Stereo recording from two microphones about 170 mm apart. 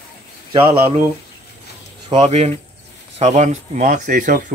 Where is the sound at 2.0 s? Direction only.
30° right (ahead or behind).